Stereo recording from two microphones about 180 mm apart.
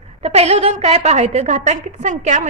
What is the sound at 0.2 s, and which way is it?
A woman's voice, 35° right (ahead or behind).